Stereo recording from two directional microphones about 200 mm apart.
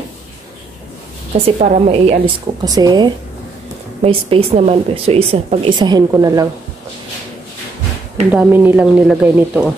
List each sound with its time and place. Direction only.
1.6 s a woman's voice: 35° right (ahead or behind)
2.6 s speech: 20° right (ahead or behind)
8.3 s speech: 10° right (ahead or behind)